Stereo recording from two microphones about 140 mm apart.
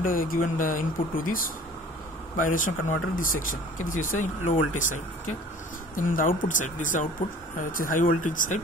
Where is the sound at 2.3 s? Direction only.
70° left (ahead or behind).